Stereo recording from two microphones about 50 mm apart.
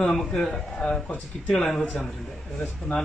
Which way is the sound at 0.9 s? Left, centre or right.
Left.